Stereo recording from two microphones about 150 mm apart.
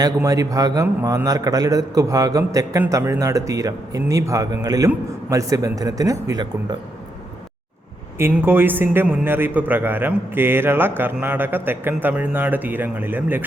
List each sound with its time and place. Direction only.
0.0 s a man's voice: 25° right (ahead or behind)
8.2 s a man's voice: 15° right (ahead or behind)